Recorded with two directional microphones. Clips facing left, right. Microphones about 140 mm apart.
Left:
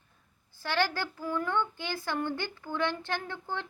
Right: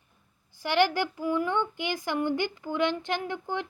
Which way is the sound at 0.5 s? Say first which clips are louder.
Right 6 dB; 15° right (ahead or behind).